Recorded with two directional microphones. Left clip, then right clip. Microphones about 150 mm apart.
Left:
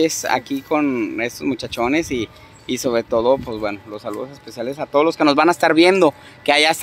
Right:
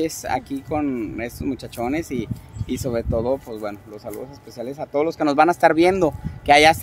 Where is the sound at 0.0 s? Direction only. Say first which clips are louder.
Left 6 dB; 35° left (ahead or behind).